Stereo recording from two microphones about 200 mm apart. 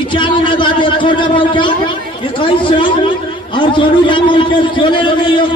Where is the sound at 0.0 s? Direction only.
25° left (ahead or behind).